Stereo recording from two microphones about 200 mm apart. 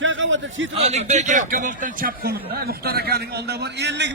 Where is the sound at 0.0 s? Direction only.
70° right (ahead or behind).